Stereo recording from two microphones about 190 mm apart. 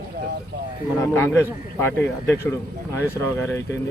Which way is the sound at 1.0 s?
10° left (ahead or behind).